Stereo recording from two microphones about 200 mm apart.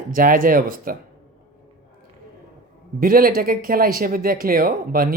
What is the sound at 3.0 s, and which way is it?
Speech, 45° right (ahead or behind).